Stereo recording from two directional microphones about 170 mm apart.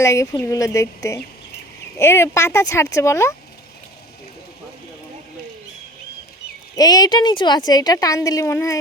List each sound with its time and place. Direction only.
0.0 s speech: 15° left (ahead or behind)
6.7 s a woman's voice: 20° left (ahead or behind)